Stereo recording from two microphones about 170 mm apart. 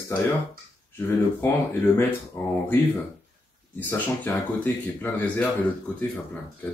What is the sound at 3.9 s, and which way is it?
Speech, 10° left (ahead or behind).